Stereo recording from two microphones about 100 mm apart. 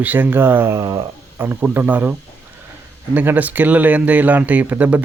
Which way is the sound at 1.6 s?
15° right (ahead or behind).